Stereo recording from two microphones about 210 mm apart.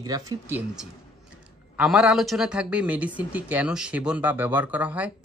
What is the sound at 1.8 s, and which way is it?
Speech, 5° right (ahead or behind).